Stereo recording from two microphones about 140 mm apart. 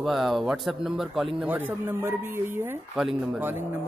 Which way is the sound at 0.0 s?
Centre (ahead or behind).